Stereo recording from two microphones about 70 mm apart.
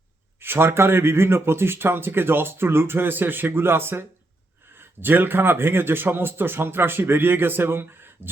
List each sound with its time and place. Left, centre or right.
0.3 s speech: right